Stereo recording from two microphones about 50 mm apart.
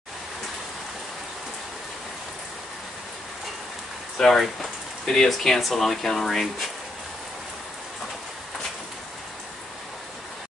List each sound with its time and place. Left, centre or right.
4.2 s speech: centre